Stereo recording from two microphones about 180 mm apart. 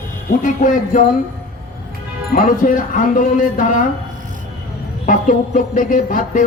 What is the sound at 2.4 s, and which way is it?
Speech, 45° left (ahead or behind).